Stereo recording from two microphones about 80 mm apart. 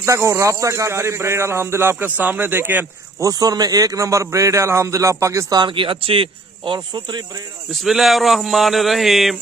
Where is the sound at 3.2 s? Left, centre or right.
Right.